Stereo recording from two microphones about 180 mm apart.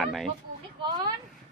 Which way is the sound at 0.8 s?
25° right (ahead or behind).